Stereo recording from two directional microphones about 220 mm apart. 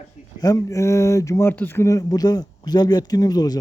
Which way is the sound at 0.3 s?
15° left (ahead or behind).